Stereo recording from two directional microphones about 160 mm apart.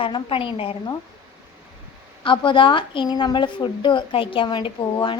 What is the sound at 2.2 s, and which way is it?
A woman's voice, 30° left (ahead or behind).